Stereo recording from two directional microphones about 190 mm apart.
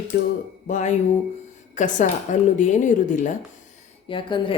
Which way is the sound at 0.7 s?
40° left (ahead or behind).